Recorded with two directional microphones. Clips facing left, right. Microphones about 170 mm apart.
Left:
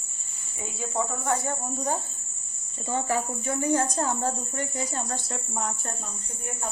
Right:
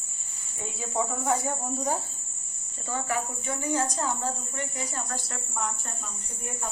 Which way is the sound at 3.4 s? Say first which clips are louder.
Left 4 dB; 45° left (ahead or behind).